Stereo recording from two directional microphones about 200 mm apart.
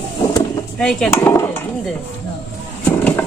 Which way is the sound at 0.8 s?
5° left (ahead or behind).